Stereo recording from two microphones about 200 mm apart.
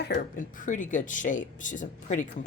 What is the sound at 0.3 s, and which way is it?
Speech, 40° left (ahead or behind).